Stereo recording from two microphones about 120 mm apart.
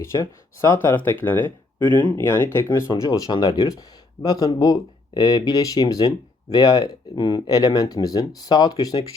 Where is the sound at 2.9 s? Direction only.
30° left (ahead or behind).